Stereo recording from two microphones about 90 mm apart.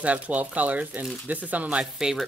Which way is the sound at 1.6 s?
5° right (ahead or behind).